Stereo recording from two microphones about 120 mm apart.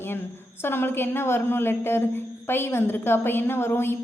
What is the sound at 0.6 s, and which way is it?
A woman's voice, 20° left (ahead or behind).